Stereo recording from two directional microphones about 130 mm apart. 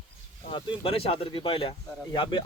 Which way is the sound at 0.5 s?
40° left (ahead or behind).